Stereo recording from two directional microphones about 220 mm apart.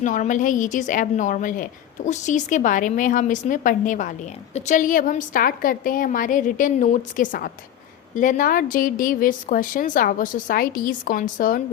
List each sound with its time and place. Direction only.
0.0 s a woman's voice: 35° left (ahead or behind)